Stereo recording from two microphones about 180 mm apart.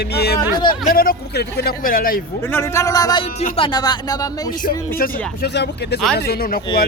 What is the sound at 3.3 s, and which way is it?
Speech, 35° left (ahead or behind).